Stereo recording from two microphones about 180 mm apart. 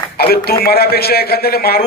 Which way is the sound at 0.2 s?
60° left (ahead or behind).